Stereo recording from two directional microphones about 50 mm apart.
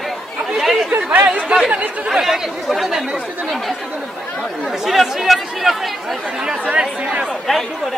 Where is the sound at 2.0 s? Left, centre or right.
Centre.